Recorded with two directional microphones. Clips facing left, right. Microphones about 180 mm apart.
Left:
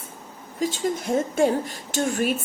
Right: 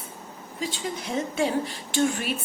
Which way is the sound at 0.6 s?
45° left (ahead or behind).